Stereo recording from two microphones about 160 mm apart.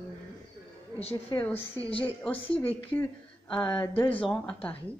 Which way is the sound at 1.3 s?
25° left (ahead or behind).